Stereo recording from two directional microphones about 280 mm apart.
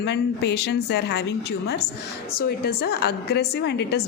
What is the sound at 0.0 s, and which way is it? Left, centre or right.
A woman's voice, left.